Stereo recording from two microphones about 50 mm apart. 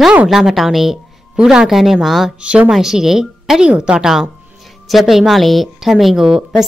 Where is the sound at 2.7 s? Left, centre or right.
Centre.